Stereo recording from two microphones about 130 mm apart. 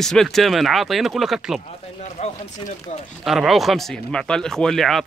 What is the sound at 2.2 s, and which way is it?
Speech, 55° left (ahead or behind).